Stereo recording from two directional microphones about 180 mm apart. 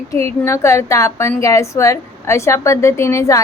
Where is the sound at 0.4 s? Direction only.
15° left (ahead or behind).